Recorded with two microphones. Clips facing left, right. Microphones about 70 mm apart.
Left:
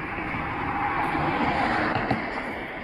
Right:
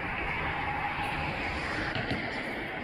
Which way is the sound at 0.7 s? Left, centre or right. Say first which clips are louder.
Left 7 dB; left.